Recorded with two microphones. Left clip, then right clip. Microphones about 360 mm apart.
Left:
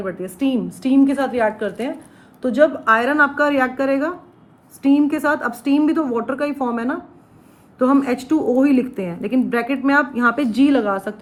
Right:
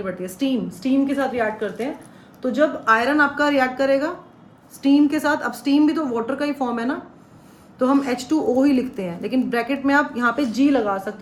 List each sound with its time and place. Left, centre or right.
0.0 s a woman's voice: centre
8.4 s a woman's voice: left
8.6 s speech: centre